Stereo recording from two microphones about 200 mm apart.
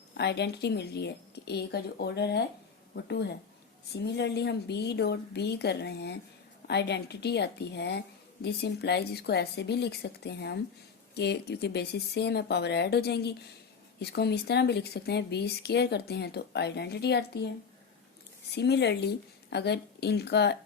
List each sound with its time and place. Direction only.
0.1 s a woman's voice: 55° left (ahead or behind)
18.5 s a woman's voice: 55° left (ahead or behind)